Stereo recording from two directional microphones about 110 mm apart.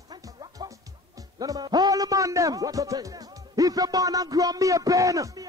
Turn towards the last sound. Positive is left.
turn(degrees=-30)  # may be behind; listen again after turning